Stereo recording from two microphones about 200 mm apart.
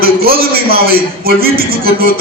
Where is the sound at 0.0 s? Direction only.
50° right (ahead or behind).